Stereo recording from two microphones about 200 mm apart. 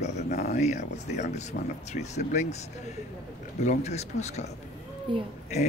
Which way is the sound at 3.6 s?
35° left (ahead or behind).